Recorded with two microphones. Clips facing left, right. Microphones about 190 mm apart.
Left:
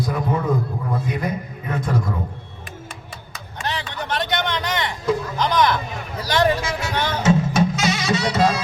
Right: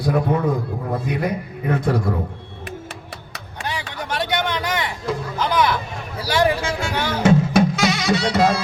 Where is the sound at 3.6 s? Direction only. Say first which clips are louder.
Left 1 dB; 10° right (ahead or behind).